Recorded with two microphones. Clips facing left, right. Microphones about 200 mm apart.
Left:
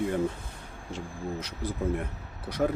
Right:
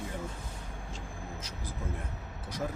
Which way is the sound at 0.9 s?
65° left (ahead or behind).